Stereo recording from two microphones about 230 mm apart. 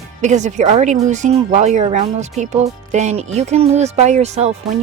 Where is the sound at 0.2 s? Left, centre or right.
Right.